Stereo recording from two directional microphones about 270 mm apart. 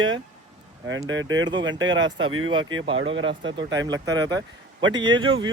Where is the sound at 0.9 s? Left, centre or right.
Right.